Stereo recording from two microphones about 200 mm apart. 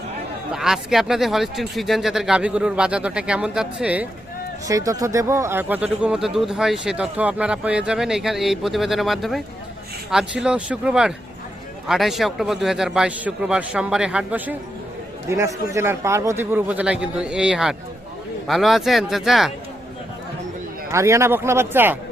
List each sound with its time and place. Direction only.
0.5 s speech: centre (ahead or behind)
4.7 s a man's voice: 15° right (ahead or behind); by 19.5 s centre (ahead or behind)
20.9 s a man's voice: 15° right (ahead or behind)